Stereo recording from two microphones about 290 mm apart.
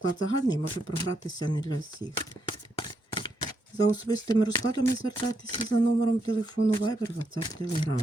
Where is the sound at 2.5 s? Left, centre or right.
Centre.